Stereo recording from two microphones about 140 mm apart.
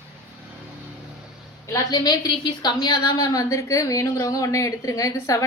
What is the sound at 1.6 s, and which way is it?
A woman's voice, 25° left (ahead or behind).